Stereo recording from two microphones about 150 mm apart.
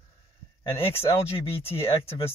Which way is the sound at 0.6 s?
40° left (ahead or behind).